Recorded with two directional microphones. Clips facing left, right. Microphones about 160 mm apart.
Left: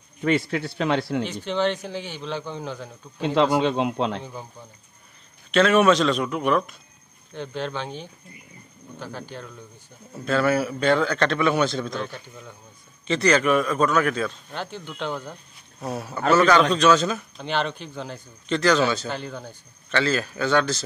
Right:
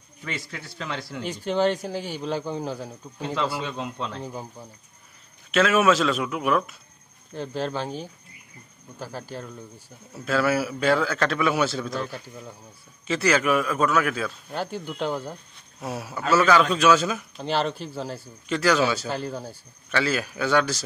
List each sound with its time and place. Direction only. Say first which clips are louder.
0.2 s a man's voice: left 13 dB; 60° left (ahead or behind)
1.4 s speech: right 6 dB; 40° right (ahead or behind)
3.2 s a man's voice: left 8 dB; 80° left
4.2 s a man's voice: right 2 dB; 10° right (ahead or behind)
7.4 s speech: right 2 dB; 40° right (ahead or behind)
10.1 s a man's voice: left 2 dB; 5° right (ahead or behind)
17.8 s speech: right 3 dB; 40° right (ahead or behind)
18.1 s a man's voice: left 2 dB; 10° right (ahead or behind)